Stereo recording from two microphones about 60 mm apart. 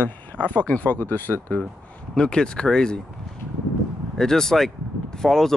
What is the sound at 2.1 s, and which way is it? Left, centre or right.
Speech, centre.